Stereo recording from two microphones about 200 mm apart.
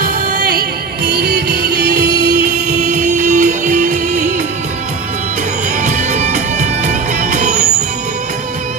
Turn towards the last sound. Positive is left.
turn(degrees=-40)  # may be behind; listen again after turning